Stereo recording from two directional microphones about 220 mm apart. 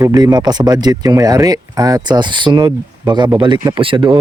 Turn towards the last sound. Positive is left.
turn(degrees=-20)  # may be behind; listen again after turning